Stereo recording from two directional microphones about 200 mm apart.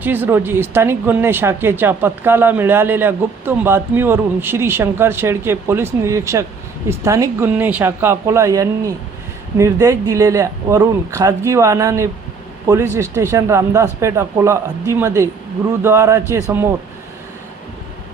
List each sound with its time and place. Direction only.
0.0 s speech: 10° right (ahead or behind)